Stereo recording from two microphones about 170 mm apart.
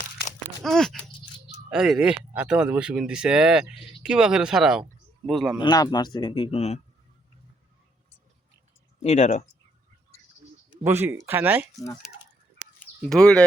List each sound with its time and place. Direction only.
0.6 s speech: 5° left (ahead or behind)
5.5 s speech: 25° left (ahead or behind)
9.0 s speech: 40° left (ahead or behind)
10.7 s speech: 15° right (ahead or behind)
12.8 s bird: 5° left (ahead or behind)